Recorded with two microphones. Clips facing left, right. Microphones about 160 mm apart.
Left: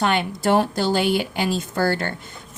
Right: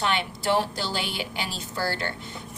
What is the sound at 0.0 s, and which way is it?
Speech, 50° left (ahead or behind).